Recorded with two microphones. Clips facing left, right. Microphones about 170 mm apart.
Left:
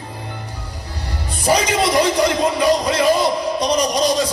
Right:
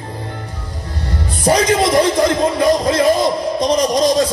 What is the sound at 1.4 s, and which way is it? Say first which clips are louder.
Speech: right 3 dB; 55° right (ahead or behind).